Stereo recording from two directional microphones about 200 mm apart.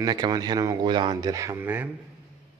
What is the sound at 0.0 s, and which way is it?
Speech, 20° right (ahead or behind).